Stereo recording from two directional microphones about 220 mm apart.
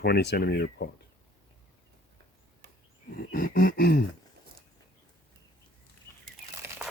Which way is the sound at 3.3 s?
40° left (ahead or behind).